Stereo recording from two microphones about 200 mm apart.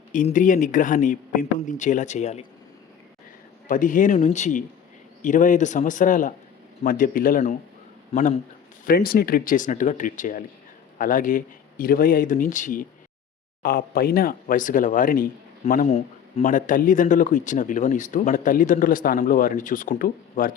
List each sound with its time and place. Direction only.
0.1 s speech: 40° left (ahead or behind)
3.7 s speech: 40° left (ahead or behind)
15.9 s speech: 30° left (ahead or behind)